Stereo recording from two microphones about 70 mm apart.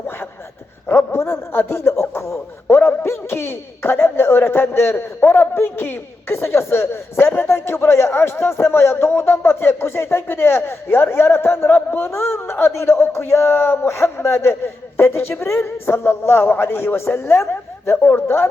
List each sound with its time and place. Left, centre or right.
0.9 s a man's voice: left